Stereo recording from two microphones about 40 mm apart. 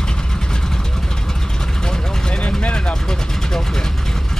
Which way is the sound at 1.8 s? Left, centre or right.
Centre.